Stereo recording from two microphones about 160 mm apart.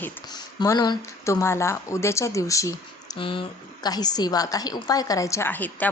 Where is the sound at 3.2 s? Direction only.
30° left (ahead or behind); by 5.8 s 10° left (ahead or behind).